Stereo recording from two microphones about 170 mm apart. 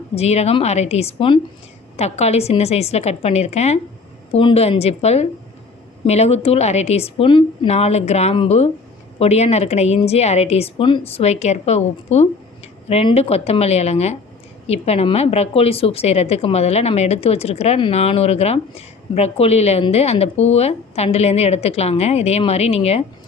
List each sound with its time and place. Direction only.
0.2 s a woman's voice: 40° left (ahead or behind)